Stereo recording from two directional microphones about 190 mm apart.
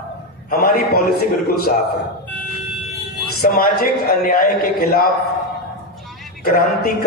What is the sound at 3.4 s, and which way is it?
A man's voice, 50° left (ahead or behind).